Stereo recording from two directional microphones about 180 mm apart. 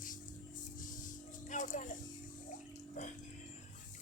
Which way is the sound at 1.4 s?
45° left (ahead or behind).